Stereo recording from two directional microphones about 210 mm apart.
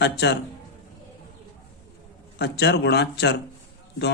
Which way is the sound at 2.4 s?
50° left (ahead or behind).